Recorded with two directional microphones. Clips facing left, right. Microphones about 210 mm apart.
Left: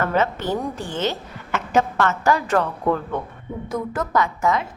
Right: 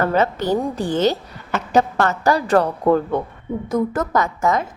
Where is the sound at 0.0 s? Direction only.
35° right (ahead or behind).